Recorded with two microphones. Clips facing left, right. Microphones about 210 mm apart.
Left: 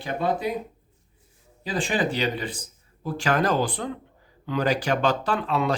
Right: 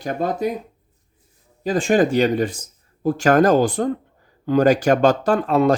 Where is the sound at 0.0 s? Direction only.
45° right (ahead or behind).